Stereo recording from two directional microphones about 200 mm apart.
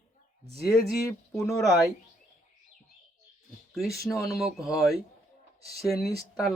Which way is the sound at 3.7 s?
Centre (ahead or behind).